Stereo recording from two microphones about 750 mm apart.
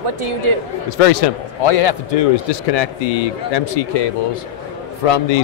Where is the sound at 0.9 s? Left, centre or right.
Left.